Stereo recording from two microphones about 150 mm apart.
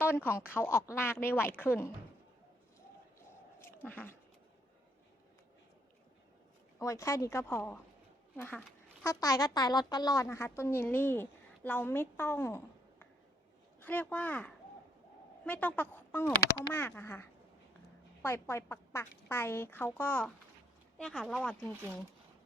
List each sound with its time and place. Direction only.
0.3 s a woman's voice: 15° left (ahead or behind)
3.2 s a sound: 15° left (ahead or behind)
6.7 s a woman's voice: 20° left (ahead or behind)
9.0 s a woman's voice: 25° left (ahead or behind); by 21.7 s 5° left (ahead or behind)